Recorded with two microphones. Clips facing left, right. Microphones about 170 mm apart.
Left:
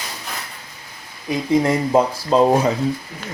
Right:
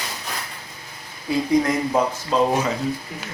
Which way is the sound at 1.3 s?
25° left (ahead or behind).